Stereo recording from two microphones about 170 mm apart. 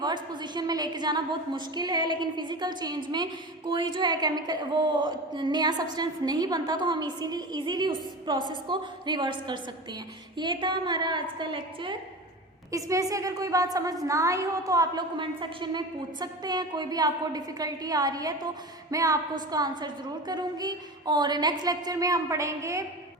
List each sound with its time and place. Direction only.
0.0 s a woman's voice: 25° right (ahead or behind)